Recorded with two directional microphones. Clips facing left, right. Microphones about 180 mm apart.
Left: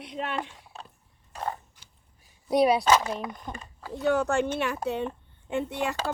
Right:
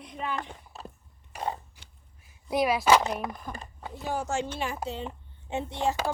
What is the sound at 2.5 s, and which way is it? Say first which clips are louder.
Speech: left 4 dB; 30° left (ahead or behind).